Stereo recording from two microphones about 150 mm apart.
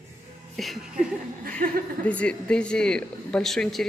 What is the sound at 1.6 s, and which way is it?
Speech, 70° right (ahead or behind).